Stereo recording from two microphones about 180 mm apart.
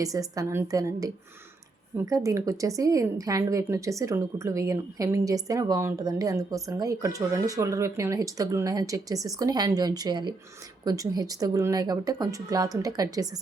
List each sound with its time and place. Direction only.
0.0 s a woman's voice: 20° right (ahead or behind)